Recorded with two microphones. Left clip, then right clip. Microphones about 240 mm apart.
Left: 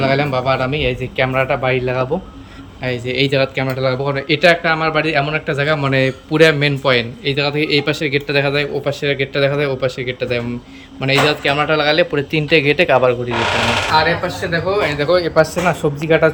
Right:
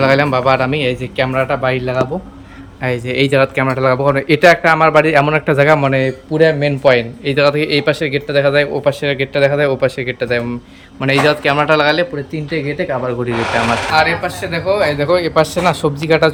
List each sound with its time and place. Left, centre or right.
0.0 s speech: centre
12.1 s speech: centre
14.8 s speech: right